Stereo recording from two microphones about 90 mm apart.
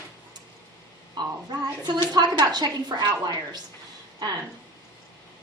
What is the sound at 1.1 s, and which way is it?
A woman's voice, 50° right (ahead or behind).